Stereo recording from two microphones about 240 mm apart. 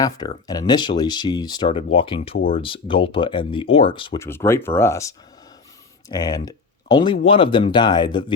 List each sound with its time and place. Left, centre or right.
0.4 s speech: centre